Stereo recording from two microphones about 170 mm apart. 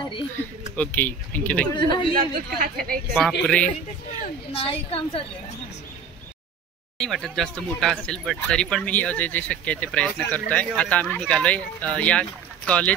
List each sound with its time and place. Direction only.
0.7 s speech: 10° left (ahead or behind)
1.8 s a man's voice: 25° left (ahead or behind)
2.1 s speech: 55° right (ahead or behind)
3.4 s speech: 5° left (ahead or behind)
4.2 s a woman's voice: 35° left (ahead or behind)
7.0 s speech: 5° left (ahead or behind)